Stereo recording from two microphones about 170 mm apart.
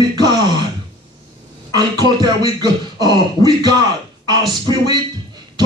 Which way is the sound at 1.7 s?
25° right (ahead or behind).